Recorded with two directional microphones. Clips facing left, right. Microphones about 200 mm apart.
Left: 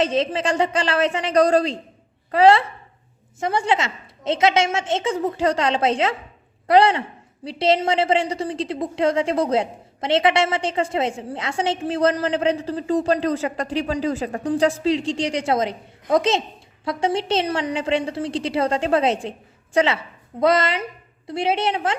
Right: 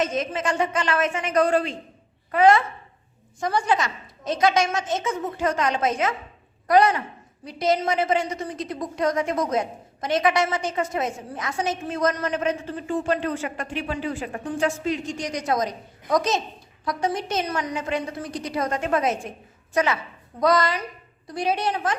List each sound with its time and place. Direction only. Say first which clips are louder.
0.0 s a man's voice: left 4 dB; 30° left (ahead or behind)